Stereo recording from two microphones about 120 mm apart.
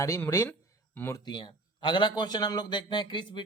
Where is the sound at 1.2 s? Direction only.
40° left (ahead or behind).